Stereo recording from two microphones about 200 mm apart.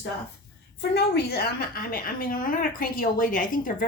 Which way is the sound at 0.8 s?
55° left (ahead or behind).